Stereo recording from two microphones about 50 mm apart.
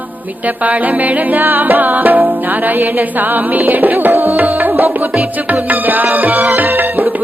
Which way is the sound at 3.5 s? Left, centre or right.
Right.